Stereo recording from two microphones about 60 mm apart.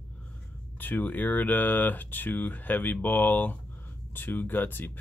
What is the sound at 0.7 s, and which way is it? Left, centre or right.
Speech, left.